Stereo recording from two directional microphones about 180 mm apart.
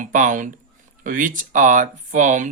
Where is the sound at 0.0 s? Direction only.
45° right (ahead or behind).